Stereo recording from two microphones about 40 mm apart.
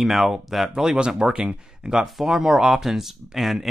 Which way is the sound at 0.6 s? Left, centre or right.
Centre.